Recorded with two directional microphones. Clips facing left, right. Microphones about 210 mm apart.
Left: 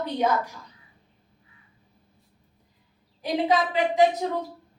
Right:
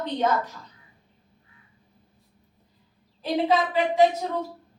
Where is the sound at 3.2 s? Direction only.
15° left (ahead or behind).